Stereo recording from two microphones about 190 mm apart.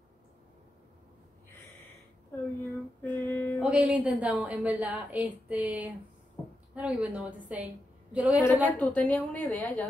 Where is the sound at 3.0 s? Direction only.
10° left (ahead or behind).